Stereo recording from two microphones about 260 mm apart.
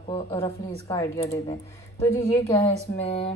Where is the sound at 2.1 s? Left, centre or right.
Centre.